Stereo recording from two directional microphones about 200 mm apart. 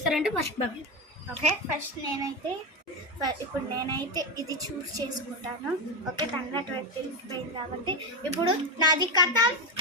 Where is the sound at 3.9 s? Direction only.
20° right (ahead or behind).